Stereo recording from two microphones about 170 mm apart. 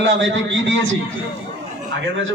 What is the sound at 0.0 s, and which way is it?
Speech, 90° right.